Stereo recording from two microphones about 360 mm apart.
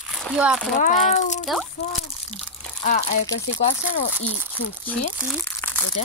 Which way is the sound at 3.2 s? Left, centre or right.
Centre.